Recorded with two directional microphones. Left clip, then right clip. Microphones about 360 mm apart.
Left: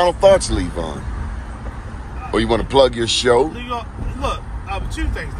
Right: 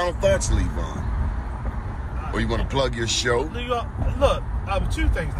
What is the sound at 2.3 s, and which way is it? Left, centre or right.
Speech, centre.